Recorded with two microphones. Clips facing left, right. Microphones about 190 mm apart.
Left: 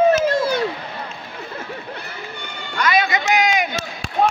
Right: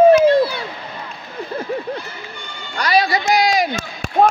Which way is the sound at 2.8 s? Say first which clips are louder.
Right 2 dB; 35° right (ahead or behind).